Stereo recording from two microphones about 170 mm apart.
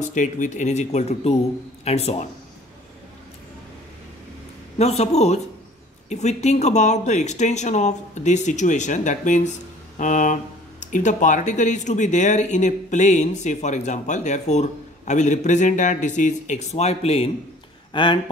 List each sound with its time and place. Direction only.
0.1 s a man's voice: 45° left (ahead or behind)
4.7 s a man's voice: 40° left (ahead or behind)